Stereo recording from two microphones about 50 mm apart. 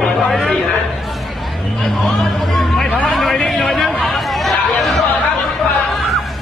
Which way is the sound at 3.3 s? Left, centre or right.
Centre.